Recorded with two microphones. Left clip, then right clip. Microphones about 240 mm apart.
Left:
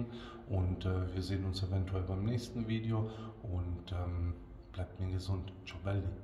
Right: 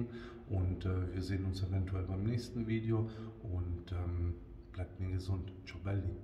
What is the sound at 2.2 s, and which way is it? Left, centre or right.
Speech, right.